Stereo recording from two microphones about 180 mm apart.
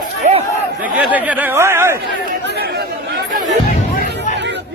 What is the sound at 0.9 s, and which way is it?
Speech, 10° right (ahead or behind).